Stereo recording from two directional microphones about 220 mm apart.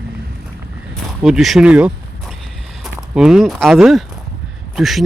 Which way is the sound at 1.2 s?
Centre (ahead or behind).